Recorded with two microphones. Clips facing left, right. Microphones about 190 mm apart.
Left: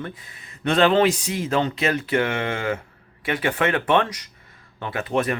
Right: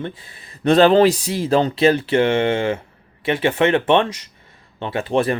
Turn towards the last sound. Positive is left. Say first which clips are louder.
# right 4 dB
turn(degrees=-30)  # may be behind; listen again after turning